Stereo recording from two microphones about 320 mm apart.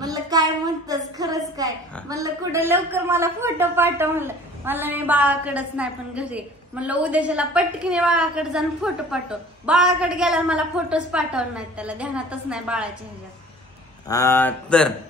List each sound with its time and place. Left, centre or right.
0.0 s child singing: centre
1.6 s a woman's voice: centre
14.0 s speech: centre